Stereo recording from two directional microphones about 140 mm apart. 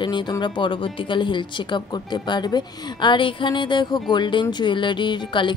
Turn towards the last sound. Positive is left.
turn(degrees=35)  # may be behind; listen again after turning